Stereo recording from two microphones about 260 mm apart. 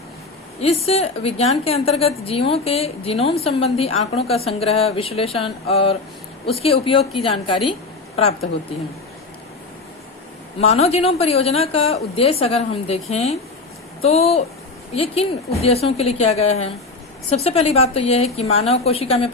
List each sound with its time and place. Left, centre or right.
0.6 s a woman's voice: left
10.7 s a woman's voice: left